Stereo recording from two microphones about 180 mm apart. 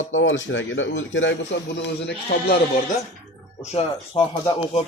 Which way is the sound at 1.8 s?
70° left (ahead or behind).